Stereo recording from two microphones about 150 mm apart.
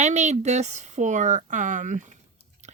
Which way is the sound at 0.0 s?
50° right (ahead or behind).